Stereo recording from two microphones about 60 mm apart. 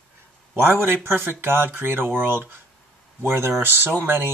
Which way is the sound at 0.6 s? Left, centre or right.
Right.